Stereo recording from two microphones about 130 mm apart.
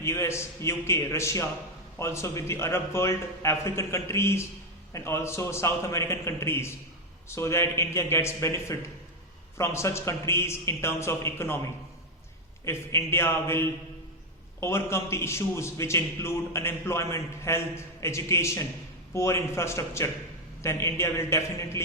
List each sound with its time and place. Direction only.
0.0 s a man's voice: 20° left (ahead or behind)